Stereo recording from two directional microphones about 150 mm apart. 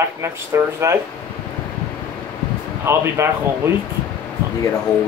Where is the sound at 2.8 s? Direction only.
15° right (ahead or behind).